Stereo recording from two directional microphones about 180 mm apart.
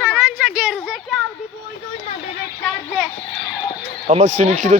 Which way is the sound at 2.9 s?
Centre (ahead or behind).